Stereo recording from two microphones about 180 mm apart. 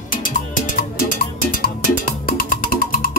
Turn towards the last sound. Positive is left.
turn(degrees=55)  # may be behind; listen again after turning